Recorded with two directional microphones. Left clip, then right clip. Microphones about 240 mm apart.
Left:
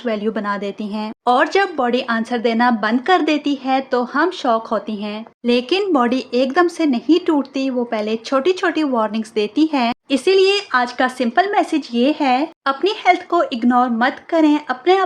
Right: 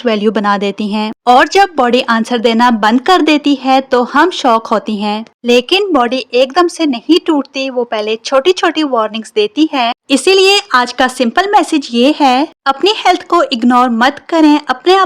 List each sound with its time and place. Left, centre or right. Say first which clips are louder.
0.0 s speech: right 9 dB; right